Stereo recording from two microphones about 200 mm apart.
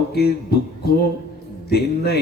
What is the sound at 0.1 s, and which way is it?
A man's voice, 50° left (ahead or behind).